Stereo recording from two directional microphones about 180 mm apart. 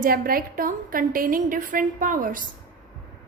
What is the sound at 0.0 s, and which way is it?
A woman's voice, 55° right (ahead or behind).